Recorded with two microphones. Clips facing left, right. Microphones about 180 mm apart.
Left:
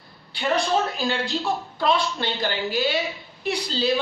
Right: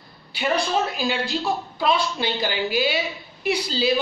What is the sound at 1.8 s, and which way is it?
Speech, 10° right (ahead or behind).